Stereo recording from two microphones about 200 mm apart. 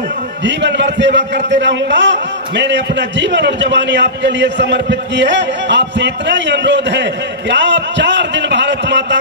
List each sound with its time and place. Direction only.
0.4 s a man's voice: 60° right (ahead or behind)